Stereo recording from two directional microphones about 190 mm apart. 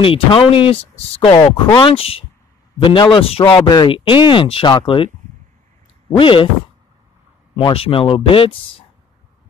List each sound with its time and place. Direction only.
0.0 s speech: 30° left (ahead or behind)
1.4 s speech: 15° left (ahead or behind)
1.9 s speech: 30° left (ahead or behind)
6.1 s speech: 25° left (ahead or behind)
7.5 s speech: 30° left (ahead or behind)